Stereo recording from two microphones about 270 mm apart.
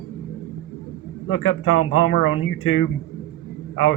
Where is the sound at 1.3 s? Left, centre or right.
Left.